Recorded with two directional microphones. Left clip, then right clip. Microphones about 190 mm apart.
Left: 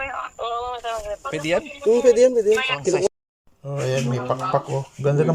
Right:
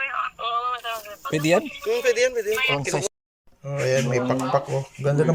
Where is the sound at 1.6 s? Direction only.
40° left (ahead or behind).